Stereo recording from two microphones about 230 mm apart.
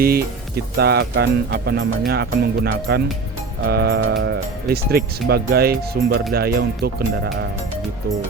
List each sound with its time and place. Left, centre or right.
0.0 s speech: right